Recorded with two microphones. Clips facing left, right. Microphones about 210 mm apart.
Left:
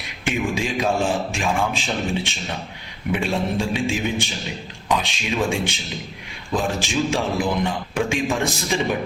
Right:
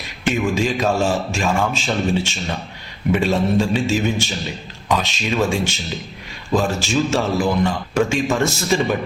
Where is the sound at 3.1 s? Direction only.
10° left (ahead or behind).